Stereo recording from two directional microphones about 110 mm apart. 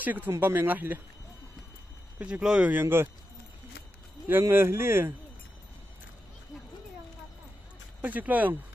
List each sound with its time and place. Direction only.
0.0 s speech: 15° right (ahead or behind)
2.1 s speech: 10° right (ahead or behind)
4.3 s speech: 20° right (ahead or behind)
8.0 s speech: 15° right (ahead or behind)